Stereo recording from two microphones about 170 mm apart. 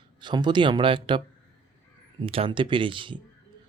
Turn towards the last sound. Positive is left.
turn(degrees=-30)  # may be behind; listen again after turning